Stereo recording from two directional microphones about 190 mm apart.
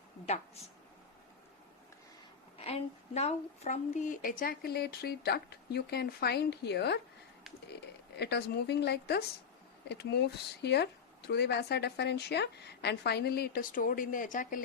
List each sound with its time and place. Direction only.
2.6 s a woman's voice: 35° left (ahead or behind); by 7.0 s 60° left (ahead or behind)
8.2 s a woman's voice: 60° left (ahead or behind); by 14.6 s 45° left (ahead or behind)